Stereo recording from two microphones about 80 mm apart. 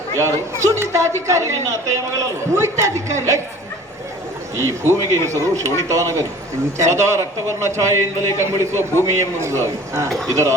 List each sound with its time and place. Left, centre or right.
0.2 s a man's voice: right
4.5 s a man's voice: right
8.5 s a man's voice: left
9.1 s a man's voice: right